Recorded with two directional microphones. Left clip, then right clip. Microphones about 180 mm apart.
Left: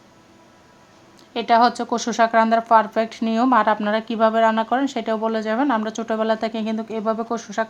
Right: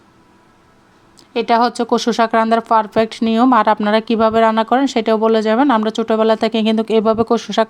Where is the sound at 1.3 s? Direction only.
30° right (ahead or behind).